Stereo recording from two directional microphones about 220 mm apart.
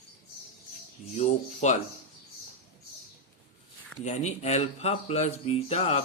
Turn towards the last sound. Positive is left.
turn(degrees=30)  # may be behind; listen again after turning